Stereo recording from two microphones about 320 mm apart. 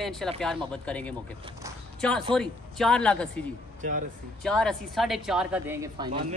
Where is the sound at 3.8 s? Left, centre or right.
Right.